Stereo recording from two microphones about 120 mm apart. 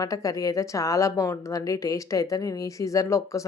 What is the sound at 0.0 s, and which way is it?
A woman's voice, 30° left (ahead or behind).